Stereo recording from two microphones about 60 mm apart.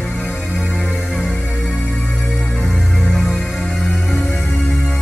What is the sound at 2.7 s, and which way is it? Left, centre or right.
Music, centre.